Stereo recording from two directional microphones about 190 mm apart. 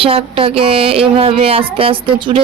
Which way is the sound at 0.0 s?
30° right (ahead or behind).